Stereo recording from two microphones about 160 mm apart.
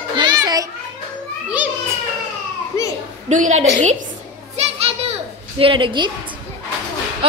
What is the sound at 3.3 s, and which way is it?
Speech, 50° right (ahead or behind).